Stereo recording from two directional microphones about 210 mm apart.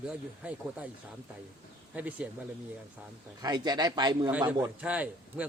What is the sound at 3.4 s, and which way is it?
Speech, 20° right (ahead or behind).